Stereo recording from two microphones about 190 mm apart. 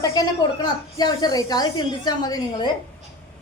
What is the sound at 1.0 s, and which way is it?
A woman's voice, 20° left (ahead or behind).